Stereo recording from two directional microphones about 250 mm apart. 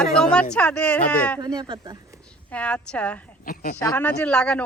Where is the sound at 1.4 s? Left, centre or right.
Centre.